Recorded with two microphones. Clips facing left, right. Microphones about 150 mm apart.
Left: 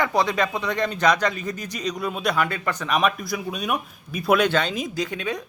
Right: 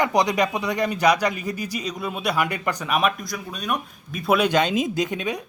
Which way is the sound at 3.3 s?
10° left (ahead or behind).